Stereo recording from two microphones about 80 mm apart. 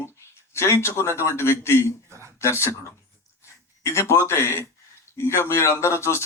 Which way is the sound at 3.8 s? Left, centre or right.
Left.